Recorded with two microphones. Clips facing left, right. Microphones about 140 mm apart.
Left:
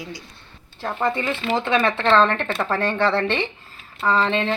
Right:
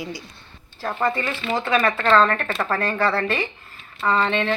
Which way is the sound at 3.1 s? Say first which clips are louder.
Left 2 dB; 25° left (ahead or behind).